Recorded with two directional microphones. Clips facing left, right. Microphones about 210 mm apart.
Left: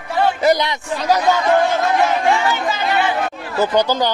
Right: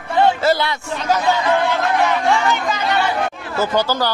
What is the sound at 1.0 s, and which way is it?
Speech, 40° left (ahead or behind).